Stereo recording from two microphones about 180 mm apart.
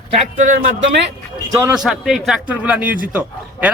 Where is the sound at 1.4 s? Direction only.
20° right (ahead or behind).